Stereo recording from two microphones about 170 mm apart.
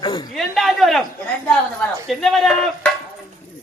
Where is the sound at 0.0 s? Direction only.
30° left (ahead or behind).